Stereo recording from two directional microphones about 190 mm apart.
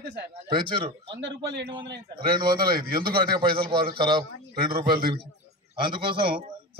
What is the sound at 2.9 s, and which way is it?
Speech, 50° right (ahead or behind).